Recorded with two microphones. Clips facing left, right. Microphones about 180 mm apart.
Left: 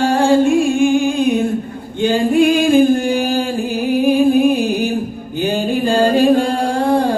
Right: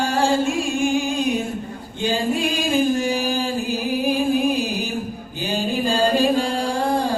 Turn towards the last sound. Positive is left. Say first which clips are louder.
# left 6 dB
turn(degrees=55)  # may be behind; listen again after turning